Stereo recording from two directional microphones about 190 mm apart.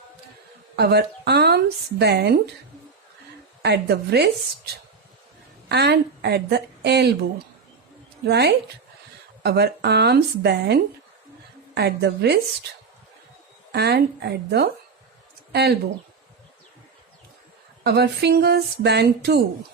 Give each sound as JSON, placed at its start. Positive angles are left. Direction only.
{"t": 0.8, "sound": "a woman's voice", "side_deg": -60}
{"t": 3.6, "sound": "a woman's voice", "side_deg": -60}
{"t": 8.3, "sound": "a woman's voice", "side_deg": -60}
{"t": 13.7, "sound": "a woman's voice", "side_deg": -60}
{"t": 17.8, "sound": "a woman's voice", "side_deg": -60}